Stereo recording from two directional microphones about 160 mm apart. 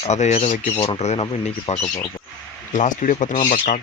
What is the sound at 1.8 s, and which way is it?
Speech, 25° left (ahead or behind).